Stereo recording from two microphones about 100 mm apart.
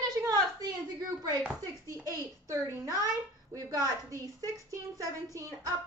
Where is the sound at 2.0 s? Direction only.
35° right (ahead or behind).